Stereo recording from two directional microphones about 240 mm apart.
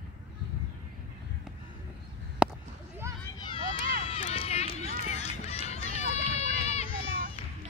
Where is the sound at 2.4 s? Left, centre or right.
Centre.